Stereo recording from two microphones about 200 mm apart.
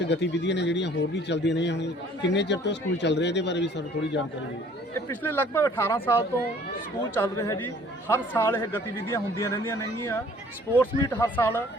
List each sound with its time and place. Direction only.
0.0 s speech: 60° left (ahead or behind)
4.9 s speech: 10° left (ahead or behind)